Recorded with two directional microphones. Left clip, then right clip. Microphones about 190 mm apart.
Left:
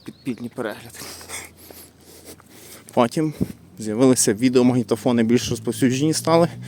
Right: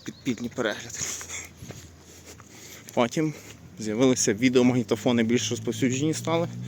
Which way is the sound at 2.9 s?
30° left (ahead or behind).